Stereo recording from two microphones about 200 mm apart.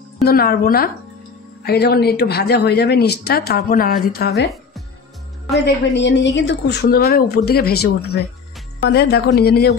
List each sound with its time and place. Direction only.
0.2 s speech: 50° left (ahead or behind)
5.6 s speech: 60° left (ahead or behind)